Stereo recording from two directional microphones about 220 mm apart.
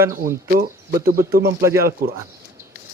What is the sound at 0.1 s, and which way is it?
Speech, 40° right (ahead or behind).